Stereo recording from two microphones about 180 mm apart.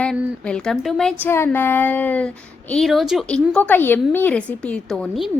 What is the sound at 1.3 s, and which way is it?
A woman's voice, 10° left (ahead or behind).